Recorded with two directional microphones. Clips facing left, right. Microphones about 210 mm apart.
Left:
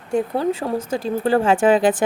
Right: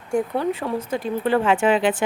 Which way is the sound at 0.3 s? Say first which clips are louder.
Left 2 dB; 35° left (ahead or behind).